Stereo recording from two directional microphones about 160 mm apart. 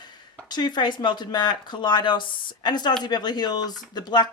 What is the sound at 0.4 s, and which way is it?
Speech, 25° left (ahead or behind).